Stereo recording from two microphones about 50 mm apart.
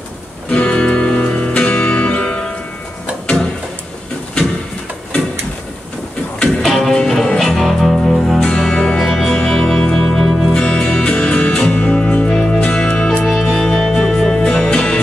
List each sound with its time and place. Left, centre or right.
0.5 s music: left
6.6 s music: centre
8.5 s music: centre
13.2 s music: centre